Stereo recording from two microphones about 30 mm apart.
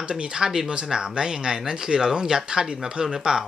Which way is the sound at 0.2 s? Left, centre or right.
Right.